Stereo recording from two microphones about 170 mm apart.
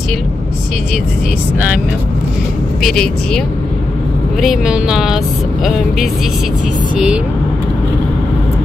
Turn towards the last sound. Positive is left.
turn(degrees=-5)  # may be behind; listen again after turning